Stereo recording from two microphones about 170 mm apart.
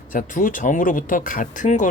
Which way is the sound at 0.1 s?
55° left (ahead or behind).